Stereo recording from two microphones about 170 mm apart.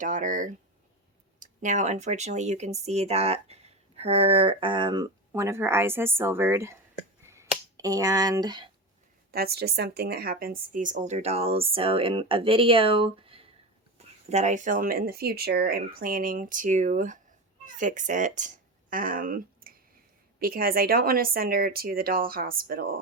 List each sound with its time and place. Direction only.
0.0 s a woman's voice: 50° right (ahead or behind); by 5.0 s 25° right (ahead or behind)
5.3 s a woman's voice: 15° right (ahead or behind)
7.3 s finger snapping: 20° right (ahead or behind)
9.3 s a woman's voice: 65° right (ahead or behind); by 13.4 s 30° right (ahead or behind)
14.3 s speech: 40° right (ahead or behind); by 23.0 s 60° right (ahead or behind)